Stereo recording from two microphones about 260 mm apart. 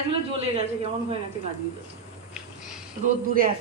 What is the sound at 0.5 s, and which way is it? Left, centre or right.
Speech, right.